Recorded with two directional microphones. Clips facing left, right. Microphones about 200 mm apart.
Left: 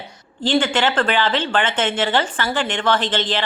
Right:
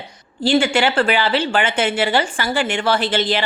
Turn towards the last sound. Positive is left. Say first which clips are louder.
# right 2 dB
turn(degrees=-10)  # may be behind; listen again after turning